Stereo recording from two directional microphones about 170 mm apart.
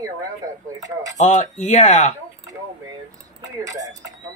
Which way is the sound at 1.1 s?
45° left (ahead or behind).